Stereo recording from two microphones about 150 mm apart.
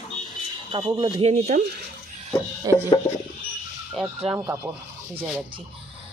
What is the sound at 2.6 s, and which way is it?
Speech, 25° right (ahead or behind).